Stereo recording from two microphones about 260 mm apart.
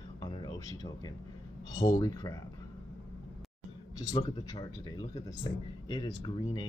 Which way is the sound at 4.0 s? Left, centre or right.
Centre.